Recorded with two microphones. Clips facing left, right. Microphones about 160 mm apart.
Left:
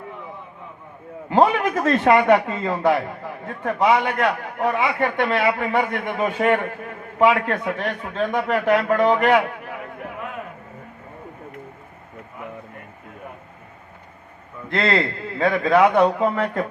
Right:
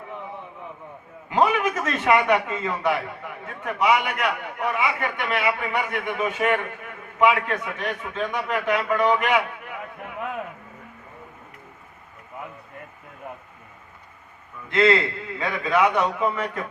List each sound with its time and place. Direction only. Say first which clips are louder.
1.3 s a sound: left 4 dB; 35° left (ahead or behind)
2.1 s speech: left 3 dB; 20° left (ahead or behind)
2.5 s a man's voice: left 4 dB; 35° left (ahead or behind)
14.7 s a man's voice: right 2 dB; 35° left (ahead or behind)